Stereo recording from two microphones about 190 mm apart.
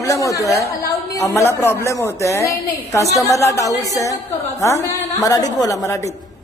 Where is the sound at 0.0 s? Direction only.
15° left (ahead or behind).